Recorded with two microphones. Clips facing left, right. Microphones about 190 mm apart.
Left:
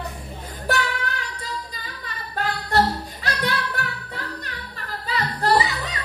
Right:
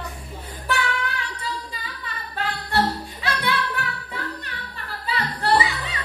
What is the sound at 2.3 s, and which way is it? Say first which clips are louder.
Singing: left 3 dB; 40° left (ahead or behind).